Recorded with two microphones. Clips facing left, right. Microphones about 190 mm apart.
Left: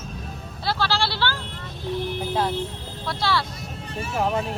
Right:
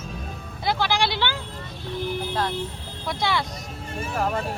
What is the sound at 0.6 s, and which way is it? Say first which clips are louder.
Speech: right 1 dB; 15° right (ahead or behind).